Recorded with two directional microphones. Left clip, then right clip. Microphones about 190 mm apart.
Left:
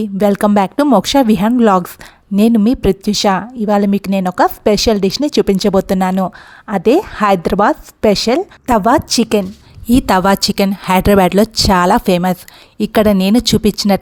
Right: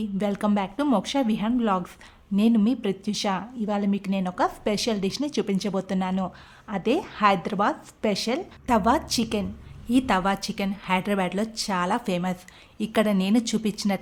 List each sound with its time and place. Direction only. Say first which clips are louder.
0.0 s a woman's voice: left 14 dB; 50° left (ahead or behind)